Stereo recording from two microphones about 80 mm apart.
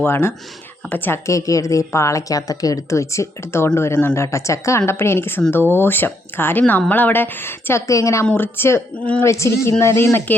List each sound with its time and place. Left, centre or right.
0.0 s a woman's voice: left
1.3 s a woman's voice: left
7.9 s a woman's voice: left
8.3 s a woman's voice: left